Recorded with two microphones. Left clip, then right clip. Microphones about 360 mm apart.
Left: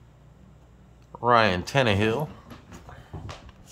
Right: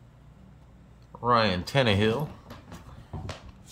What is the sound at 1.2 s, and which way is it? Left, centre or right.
Speech, centre.